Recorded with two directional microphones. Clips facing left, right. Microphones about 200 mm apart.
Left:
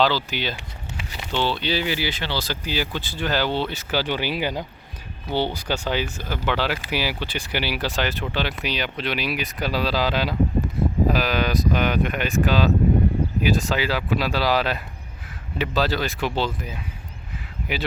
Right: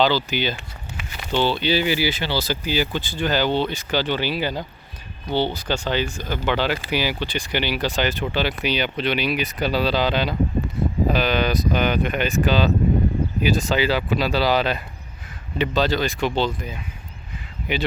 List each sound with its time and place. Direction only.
0.0 s speech: centre (ahead or behind)
0.9 s a sound: 30° left (ahead or behind)
1.3 s speech: centre (ahead or behind)